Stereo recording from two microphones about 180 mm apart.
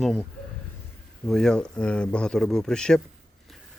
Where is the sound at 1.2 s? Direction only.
5° left (ahead or behind).